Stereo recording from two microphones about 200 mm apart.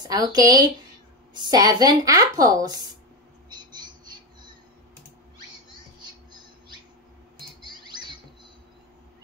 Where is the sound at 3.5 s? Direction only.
20° right (ahead or behind).